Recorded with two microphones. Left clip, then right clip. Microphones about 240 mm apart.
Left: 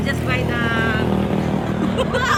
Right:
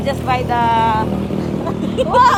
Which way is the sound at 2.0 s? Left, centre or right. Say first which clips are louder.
Right 11 dB; centre.